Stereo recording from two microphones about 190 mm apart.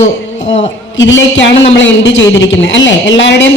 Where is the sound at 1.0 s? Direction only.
75° left (ahead or behind).